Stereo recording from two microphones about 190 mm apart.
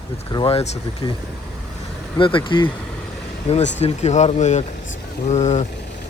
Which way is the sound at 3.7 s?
35° left (ahead or behind).